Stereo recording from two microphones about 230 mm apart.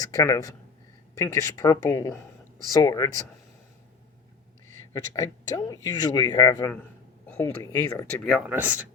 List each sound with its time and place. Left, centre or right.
0.0 s a man's voice: centre
5.1 s a man's voice: centre
8.3 s speech: centre